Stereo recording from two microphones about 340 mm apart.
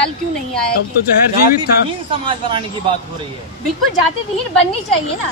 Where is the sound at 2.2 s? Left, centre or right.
Centre.